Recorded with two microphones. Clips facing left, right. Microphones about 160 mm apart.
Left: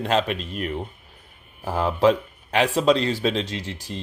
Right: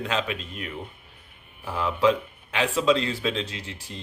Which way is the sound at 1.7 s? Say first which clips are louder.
Left 3 dB; 40° left (ahead or behind).